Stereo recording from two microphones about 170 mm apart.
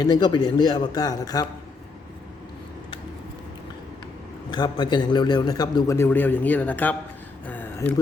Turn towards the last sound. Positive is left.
turn(degrees=10)  # may be behind; listen again after turning